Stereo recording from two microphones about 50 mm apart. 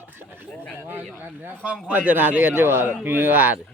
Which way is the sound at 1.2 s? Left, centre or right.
Right.